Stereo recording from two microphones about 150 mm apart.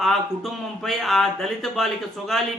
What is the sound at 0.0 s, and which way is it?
Speech, centre (ahead or behind).